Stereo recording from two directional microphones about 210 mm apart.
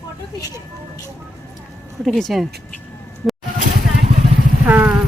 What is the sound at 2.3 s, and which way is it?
Speech, centre (ahead or behind).